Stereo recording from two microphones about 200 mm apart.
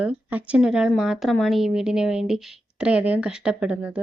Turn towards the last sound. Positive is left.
turn(degrees=-5)  # may be behind; listen again after turning